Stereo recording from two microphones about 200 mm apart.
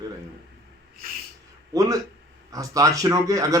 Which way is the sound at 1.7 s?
15° right (ahead or behind).